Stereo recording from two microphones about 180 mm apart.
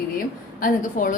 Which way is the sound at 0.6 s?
45° left (ahead or behind).